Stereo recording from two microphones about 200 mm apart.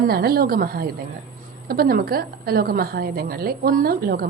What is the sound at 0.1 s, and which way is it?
A woman's voice, 50° right (ahead or behind).